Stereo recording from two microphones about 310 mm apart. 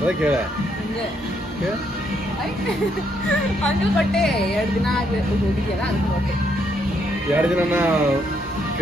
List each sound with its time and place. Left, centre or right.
3.3 s speech: centre
7.3 s speech: centre